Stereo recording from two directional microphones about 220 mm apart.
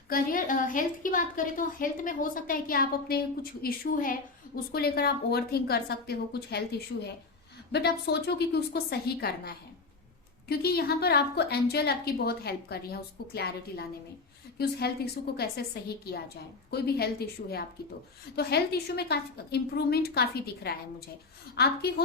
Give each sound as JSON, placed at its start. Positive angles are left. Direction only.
{"t": 0.1, "sound": "a woman's voice", "side_deg": 40}
{"t": 7.7, "sound": "a woman's voice", "side_deg": 50}
{"t": 15.4, "sound": "a woman's voice", "side_deg": 45}